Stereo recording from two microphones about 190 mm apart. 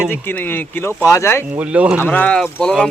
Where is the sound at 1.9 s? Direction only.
10° left (ahead or behind).